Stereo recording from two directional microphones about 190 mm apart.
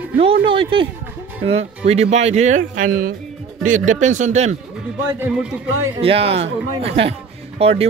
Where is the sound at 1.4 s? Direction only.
30° right (ahead or behind).